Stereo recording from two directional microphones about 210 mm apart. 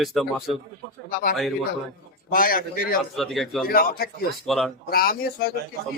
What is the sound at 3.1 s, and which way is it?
Speech, centre (ahead or behind).